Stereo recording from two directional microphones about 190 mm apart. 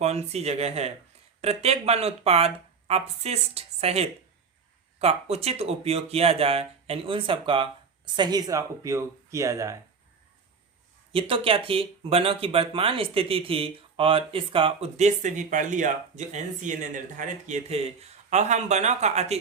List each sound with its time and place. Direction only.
0.0 s speech: 35° right (ahead or behind); by 9.8 s 15° right (ahead or behind)
11.1 s speech: 30° right (ahead or behind)